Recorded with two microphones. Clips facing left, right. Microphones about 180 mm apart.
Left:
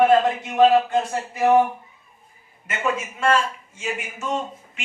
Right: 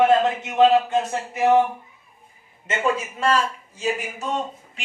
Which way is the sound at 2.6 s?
30° right (ahead or behind).